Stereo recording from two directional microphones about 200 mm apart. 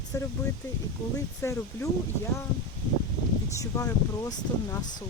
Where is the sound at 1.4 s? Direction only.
15° left (ahead or behind).